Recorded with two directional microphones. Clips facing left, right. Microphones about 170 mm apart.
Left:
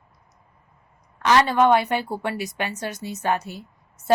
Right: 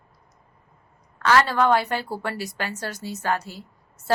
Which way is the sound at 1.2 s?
20° left (ahead or behind).